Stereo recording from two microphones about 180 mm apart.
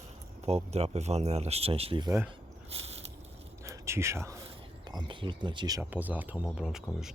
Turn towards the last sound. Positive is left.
turn(degrees=-5)  # may be behind; listen again after turning